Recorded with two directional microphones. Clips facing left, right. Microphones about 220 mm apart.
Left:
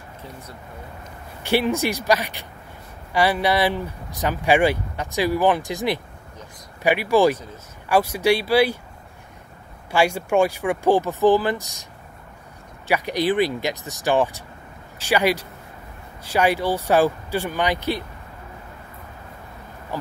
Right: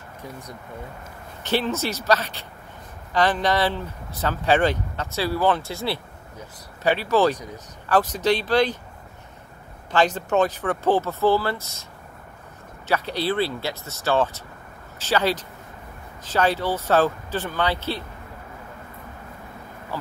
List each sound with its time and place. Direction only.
0.2 s speech: 15° right (ahead or behind)
1.4 s speech: 15° left (ahead or behind)
9.8 s speech: 10° left (ahead or behind)
12.8 s speech: 15° left (ahead or behind)
19.9 s a sound: 15° left (ahead or behind)